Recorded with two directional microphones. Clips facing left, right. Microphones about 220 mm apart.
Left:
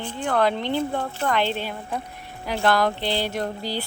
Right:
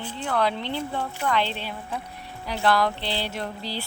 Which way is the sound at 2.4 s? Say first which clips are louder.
Left 2 dB; 45° left (ahead or behind).